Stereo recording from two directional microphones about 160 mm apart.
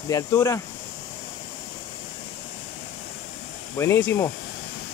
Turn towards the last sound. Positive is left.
turn(degrees=15)  # may be behind; listen again after turning